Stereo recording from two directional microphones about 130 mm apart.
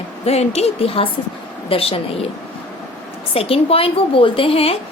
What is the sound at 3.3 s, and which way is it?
A woman's voice, 45° left (ahead or behind).